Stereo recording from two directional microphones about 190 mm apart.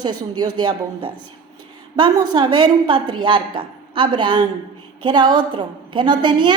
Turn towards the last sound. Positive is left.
turn(degrees=-25)  # may be behind; listen again after turning